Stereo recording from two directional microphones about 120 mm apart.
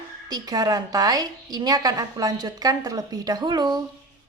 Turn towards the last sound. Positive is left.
turn(degrees=-35)  # may be behind; listen again after turning